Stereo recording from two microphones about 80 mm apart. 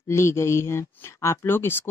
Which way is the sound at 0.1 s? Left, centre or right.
Left.